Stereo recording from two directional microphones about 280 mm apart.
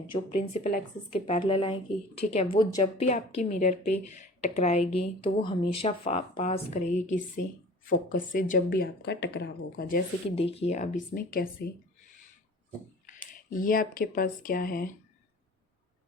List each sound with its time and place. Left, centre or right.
0.1 s speech: centre; by 11.7 s left
13.1 s speech: left